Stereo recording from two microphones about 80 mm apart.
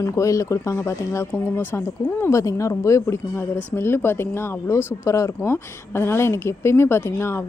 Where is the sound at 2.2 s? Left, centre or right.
Left.